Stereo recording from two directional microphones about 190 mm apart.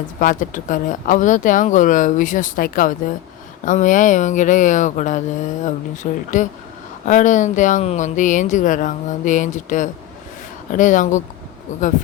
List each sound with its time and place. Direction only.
0.2 s speech: 45° left (ahead or behind)